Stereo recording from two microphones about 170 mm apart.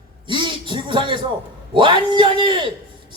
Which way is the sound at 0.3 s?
30° right (ahead or behind).